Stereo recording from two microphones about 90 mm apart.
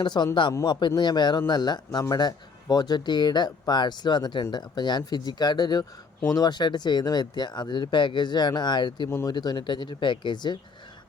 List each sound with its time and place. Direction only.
0.0 s speech: 55° left (ahead or behind)
9.0 s speech: 30° left (ahead or behind)
9.3 s speech: 50° left (ahead or behind)